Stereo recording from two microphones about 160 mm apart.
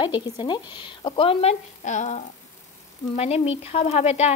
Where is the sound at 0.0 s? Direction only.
30° left (ahead or behind).